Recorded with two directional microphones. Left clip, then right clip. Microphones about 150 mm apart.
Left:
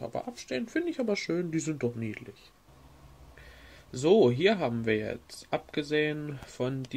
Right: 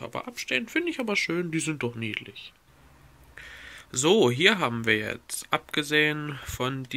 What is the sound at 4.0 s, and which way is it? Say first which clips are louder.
Speech: right 2 dB; 20° right (ahead or behind).